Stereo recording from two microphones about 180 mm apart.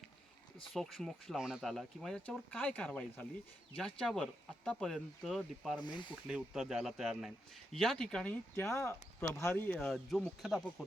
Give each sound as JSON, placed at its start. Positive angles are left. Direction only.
{"t": 0.7, "sound": "speech", "side_deg": 0}
{"t": 5.8, "sound": "speech", "side_deg": 25}
{"t": 6.2, "sound": "speech", "side_deg": -5}